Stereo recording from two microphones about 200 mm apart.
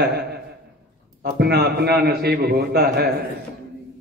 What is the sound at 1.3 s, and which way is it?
A man's voice, 55° right (ahead or behind).